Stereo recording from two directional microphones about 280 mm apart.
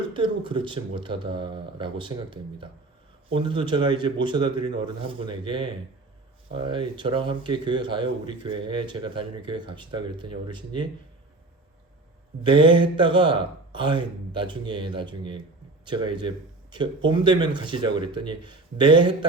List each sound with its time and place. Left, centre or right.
0.1 s speech: centre
12.4 s speech: centre